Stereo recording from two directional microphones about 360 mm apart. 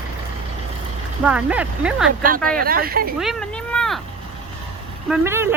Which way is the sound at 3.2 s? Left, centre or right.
Centre.